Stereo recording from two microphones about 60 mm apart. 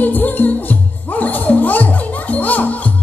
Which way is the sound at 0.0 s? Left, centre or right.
Left.